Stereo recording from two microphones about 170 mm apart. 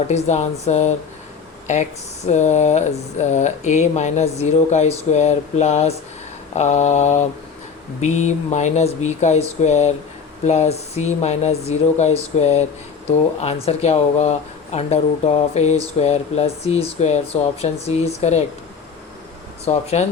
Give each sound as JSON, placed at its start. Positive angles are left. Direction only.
{"t": 0.1, "sound": "speech", "side_deg": 40}
{"t": 19.6, "sound": "speech", "side_deg": 40}